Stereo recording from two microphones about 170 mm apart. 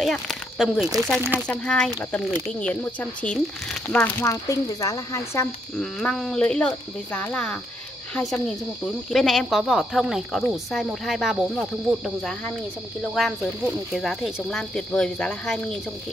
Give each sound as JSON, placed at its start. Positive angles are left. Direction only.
{"t": 0.0, "sound": "speech", "side_deg": 0}
{"t": 5.8, "sound": "speech", "side_deg": 0}